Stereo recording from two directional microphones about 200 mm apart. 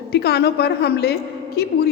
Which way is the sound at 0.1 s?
55° left (ahead or behind).